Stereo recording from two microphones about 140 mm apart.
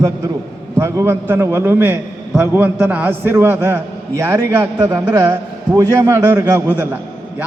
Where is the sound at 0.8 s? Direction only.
20° right (ahead or behind).